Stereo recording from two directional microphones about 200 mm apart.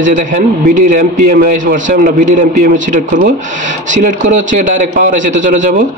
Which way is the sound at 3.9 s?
40° right (ahead or behind).